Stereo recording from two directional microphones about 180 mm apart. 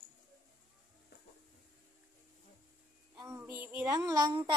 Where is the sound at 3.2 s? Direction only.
15° right (ahead or behind).